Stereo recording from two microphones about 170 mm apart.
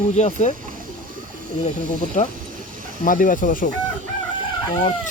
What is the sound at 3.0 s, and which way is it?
Speech, 50° left (ahead or behind).